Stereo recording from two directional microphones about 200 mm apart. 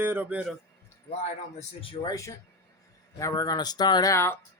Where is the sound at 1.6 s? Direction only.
25° left (ahead or behind).